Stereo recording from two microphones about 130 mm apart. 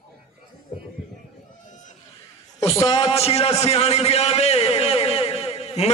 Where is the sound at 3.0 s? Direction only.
50° left (ahead or behind).